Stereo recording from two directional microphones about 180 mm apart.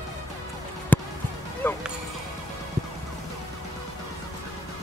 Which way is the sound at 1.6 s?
10° left (ahead or behind).